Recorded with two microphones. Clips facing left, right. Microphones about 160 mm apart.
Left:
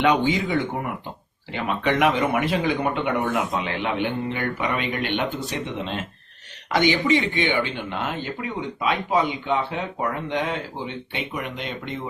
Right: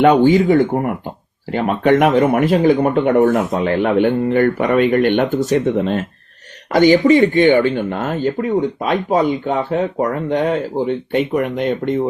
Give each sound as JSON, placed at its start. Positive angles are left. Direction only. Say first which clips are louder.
{"t": 0.0, "sound": "speech", "louder": "right 9 dB", "side_deg": -50}